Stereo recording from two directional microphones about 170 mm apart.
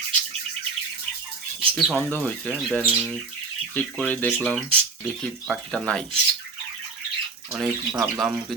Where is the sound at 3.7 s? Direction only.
10° left (ahead or behind).